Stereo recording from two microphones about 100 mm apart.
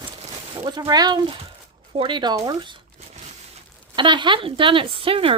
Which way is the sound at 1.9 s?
60° right (ahead or behind).